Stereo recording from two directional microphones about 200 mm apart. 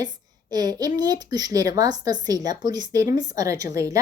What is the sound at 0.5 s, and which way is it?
Speech, 20° right (ahead or behind).